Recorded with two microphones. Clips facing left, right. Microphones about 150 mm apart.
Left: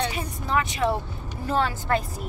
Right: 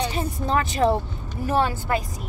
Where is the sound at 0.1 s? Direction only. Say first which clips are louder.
Right 3 dB; 35° right (ahead or behind).